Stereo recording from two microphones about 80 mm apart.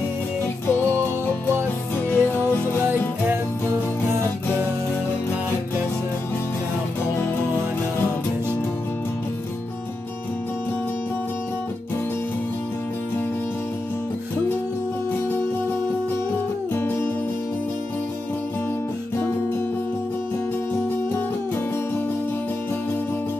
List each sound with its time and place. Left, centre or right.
0.7 s music: left